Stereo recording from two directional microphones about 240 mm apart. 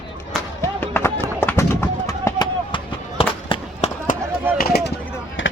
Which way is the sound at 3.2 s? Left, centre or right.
Left.